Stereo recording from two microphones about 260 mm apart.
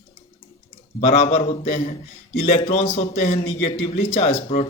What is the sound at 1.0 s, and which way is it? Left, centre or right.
Speech, left.